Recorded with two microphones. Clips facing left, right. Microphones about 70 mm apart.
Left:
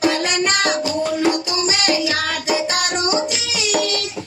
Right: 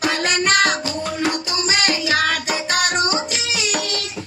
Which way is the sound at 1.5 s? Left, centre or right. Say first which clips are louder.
Left 1 dB; right.